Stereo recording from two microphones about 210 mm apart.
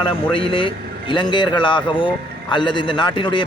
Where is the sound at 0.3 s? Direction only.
25° left (ahead or behind).